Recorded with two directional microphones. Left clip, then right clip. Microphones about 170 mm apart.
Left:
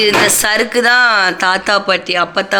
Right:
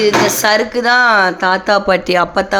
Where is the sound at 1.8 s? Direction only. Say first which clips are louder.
Right 1 dB; 40° right (ahead or behind).